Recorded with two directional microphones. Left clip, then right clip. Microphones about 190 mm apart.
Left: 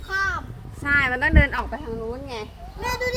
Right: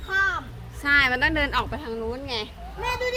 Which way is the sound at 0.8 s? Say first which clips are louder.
Right 1 dB; 5° right (ahead or behind).